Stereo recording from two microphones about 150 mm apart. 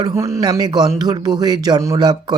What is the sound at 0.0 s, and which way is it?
Speech, 20° right (ahead or behind).